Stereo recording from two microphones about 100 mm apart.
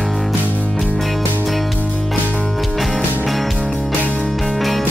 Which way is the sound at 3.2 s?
Centre (ahead or behind).